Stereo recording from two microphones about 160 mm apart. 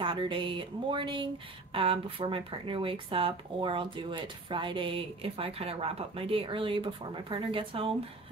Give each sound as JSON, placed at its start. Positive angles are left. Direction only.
{"t": 0.0, "sound": "speech", "side_deg": -30}